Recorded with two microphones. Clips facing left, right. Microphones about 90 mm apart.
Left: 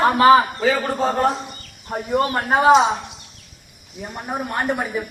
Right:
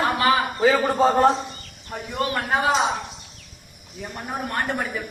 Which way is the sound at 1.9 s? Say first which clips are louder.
Left 6 dB; 35° left (ahead or behind).